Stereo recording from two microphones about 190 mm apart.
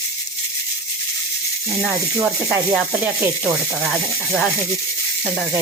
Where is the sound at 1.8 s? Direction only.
5° right (ahead or behind).